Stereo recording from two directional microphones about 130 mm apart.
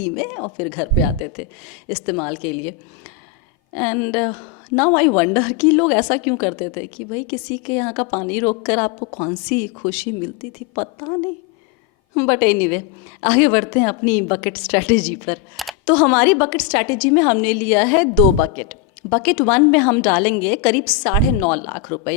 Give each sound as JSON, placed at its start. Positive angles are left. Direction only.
{"t": 0.0, "sound": "a woman's voice", "side_deg": 10}
{"t": 10.8, "sound": "a woman's voice", "side_deg": 20}
{"t": 12.1, "sound": "a woman's voice", "side_deg": 10}